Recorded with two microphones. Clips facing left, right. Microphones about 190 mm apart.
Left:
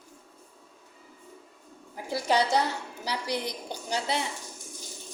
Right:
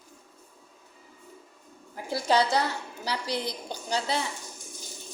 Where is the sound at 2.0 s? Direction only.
15° left (ahead or behind).